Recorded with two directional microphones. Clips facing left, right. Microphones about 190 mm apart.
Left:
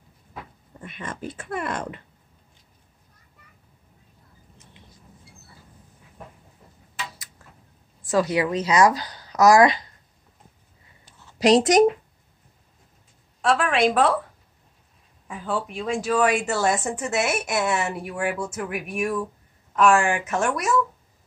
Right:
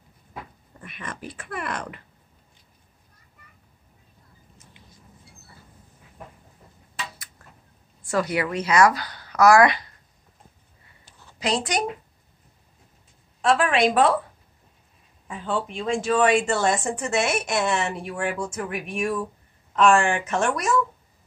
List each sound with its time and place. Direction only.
0.7 s speech: 25° left (ahead or behind)
8.0 s a woman's voice: 20° left (ahead or behind)
11.4 s speech: 40° left (ahead or behind)
13.4 s speech: centre (ahead or behind)
15.2 s speech: 5° left (ahead or behind)